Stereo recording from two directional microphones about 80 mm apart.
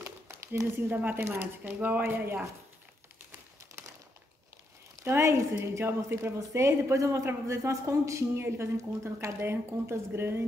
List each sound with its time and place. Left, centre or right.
0.0 s a sound: right
0.7 s speech: right
3.7 s bird: right
5.0 s a woman's voice: right